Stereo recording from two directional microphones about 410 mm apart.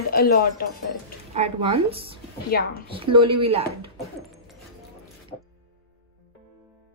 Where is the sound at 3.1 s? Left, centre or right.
Centre.